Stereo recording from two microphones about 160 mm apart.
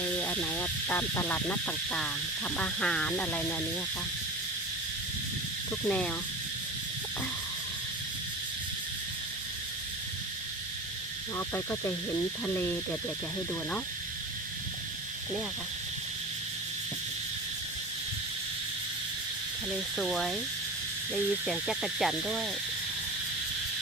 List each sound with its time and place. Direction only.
0.2 s speech: 10° left (ahead or behind)
5.8 s speech: 5° left (ahead or behind)
11.3 s speech: 15° left (ahead or behind)
19.7 s owl: centre (ahead or behind)